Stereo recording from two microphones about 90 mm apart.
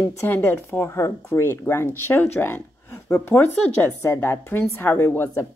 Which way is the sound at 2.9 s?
30° left (ahead or behind).